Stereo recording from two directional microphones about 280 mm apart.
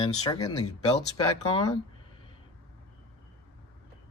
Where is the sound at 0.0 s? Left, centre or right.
Centre.